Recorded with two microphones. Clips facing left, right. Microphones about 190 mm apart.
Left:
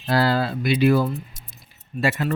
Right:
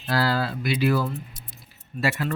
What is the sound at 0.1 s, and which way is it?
Speech, 25° left (ahead or behind).